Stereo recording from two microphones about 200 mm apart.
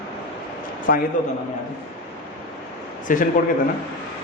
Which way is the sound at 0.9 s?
50° left (ahead or behind).